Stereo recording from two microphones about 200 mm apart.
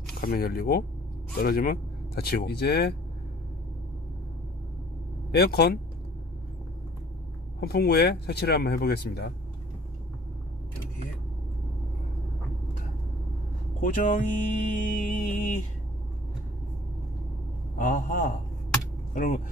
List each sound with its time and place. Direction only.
0.2 s speech: 50° left (ahead or behind)
5.3 s speech: 55° left (ahead or behind)
7.6 s speech: 50° left (ahead or behind)
13.7 s mantra: 40° left (ahead or behind)
17.7 s mantra: 40° left (ahead or behind)
19.1 s speech: 40° left (ahead or behind)